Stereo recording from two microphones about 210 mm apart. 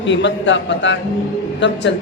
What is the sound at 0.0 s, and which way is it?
Speech, 60° left (ahead or behind).